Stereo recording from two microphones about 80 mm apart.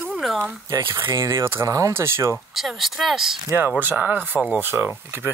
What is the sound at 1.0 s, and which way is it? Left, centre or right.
Speech, right.